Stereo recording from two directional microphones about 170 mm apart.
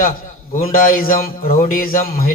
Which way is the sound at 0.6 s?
55° left (ahead or behind).